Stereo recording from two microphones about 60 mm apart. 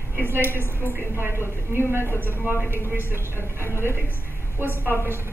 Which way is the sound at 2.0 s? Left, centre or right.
Left.